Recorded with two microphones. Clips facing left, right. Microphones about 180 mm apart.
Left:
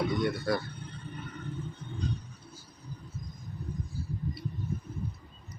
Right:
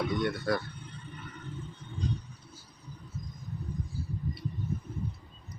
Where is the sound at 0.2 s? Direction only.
Centre (ahead or behind).